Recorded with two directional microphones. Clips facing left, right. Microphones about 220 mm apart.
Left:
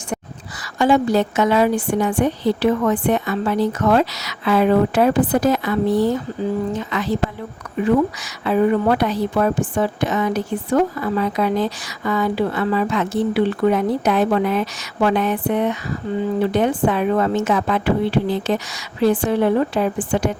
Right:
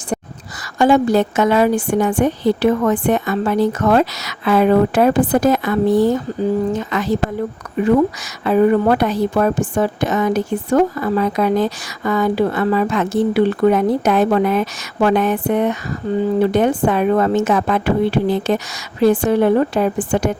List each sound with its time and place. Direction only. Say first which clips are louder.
0.8 s a woman's voice: right 3 dB; 50° right (ahead or behind)
8.4 s a woman's voice: right 3 dB; 45° right (ahead or behind)